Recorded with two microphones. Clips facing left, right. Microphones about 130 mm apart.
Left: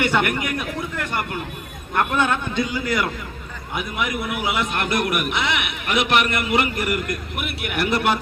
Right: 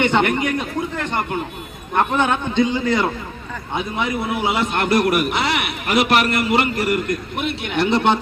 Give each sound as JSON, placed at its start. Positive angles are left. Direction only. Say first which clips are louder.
{"t": 0.0, "sound": "a man's voice", "louder": "right 4 dB", "side_deg": -20}